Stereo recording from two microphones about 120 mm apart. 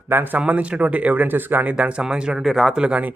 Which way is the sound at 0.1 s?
15° right (ahead or behind).